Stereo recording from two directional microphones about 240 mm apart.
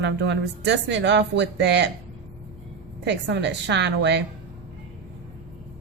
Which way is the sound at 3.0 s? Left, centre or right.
Right.